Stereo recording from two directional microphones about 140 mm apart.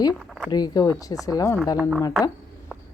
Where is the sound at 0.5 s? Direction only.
30° left (ahead or behind).